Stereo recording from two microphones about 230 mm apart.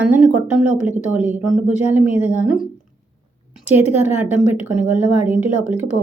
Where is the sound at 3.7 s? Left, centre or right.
Left.